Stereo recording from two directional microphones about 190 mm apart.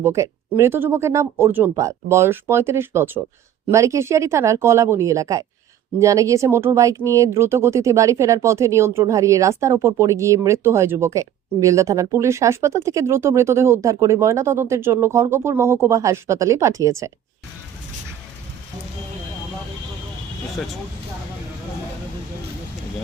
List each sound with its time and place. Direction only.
0.0 s speech: 15° right (ahead or behind)